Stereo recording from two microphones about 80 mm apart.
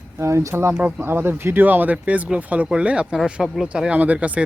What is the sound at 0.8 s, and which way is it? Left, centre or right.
Speech, centre.